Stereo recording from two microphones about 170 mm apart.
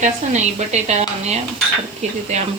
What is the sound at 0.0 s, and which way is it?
Speech, 40° right (ahead or behind).